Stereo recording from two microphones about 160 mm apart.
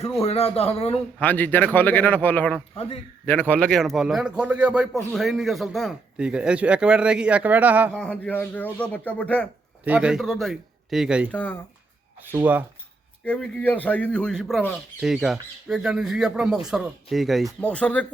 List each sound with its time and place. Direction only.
0.2 s a man's voice: 40° left (ahead or behind)
1.2 s a man's voice: 10° left (ahead or behind); by 7.9 s 10° right (ahead or behind)
7.9 s speech: 5° left (ahead or behind)
9.8 s a man's voice: 10° right (ahead or behind)
11.3 s speech: 10° left (ahead or behind)
12.3 s speech: 10° right (ahead or behind)
13.2 s a man's voice: 10° left (ahead or behind)